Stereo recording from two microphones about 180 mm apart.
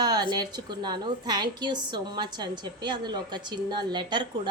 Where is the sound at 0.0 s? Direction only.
20° right (ahead or behind).